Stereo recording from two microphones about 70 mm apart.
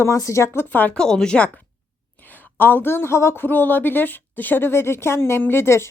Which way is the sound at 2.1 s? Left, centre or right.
Left.